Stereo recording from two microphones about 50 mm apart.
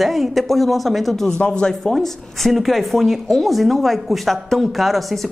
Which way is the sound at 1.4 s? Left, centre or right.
Centre.